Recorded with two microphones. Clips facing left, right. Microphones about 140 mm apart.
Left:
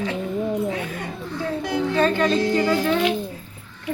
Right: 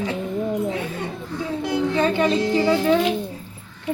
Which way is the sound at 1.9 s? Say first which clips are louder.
Left 1 dB; 20° right (ahead or behind).